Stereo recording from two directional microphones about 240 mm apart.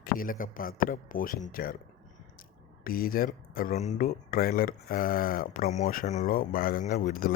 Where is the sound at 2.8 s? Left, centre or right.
Left.